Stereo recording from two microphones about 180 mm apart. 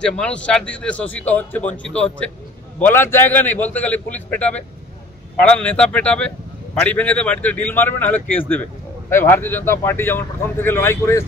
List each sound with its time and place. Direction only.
0.0 s a man's voice: 5° left (ahead or behind)